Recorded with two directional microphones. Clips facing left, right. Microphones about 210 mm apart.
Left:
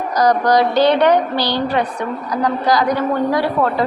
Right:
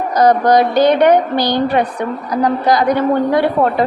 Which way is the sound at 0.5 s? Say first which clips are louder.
Right 2 dB; 50° right (ahead or behind).